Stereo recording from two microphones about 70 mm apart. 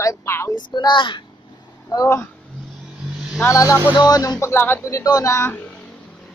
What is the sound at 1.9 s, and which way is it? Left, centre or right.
Speech, left.